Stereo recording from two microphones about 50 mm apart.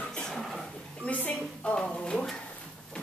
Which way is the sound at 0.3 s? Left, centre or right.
Centre.